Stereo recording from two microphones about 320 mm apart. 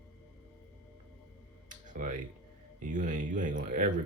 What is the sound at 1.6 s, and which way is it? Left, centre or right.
Music, right.